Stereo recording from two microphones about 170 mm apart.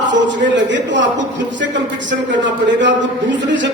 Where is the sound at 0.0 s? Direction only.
90° right.